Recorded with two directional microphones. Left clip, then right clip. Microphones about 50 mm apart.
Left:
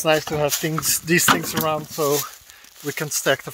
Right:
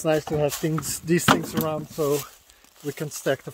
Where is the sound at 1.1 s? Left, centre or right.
Right.